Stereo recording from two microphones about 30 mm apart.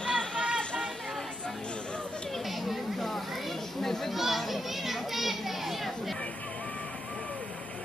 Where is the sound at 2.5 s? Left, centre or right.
Centre.